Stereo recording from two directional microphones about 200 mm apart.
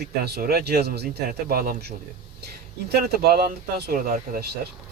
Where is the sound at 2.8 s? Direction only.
50° right (ahead or behind).